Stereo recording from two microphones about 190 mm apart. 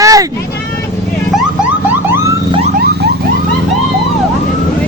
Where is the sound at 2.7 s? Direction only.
60° right (ahead or behind).